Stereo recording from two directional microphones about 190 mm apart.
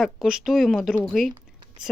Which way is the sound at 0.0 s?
Centre (ahead or behind).